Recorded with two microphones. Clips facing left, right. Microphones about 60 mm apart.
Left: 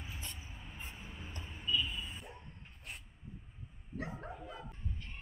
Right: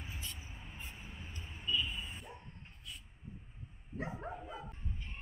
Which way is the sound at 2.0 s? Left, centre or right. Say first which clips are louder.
Left 1 dB; centre.